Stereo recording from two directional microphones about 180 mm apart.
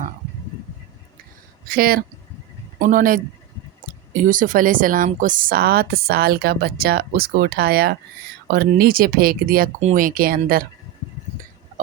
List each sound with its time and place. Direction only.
1.6 s speech: 55° right (ahead or behind)